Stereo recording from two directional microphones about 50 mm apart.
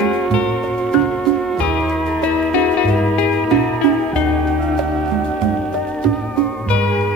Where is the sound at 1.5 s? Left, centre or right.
Left.